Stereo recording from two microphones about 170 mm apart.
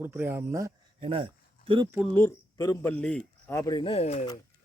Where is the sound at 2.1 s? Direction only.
15° left (ahead or behind).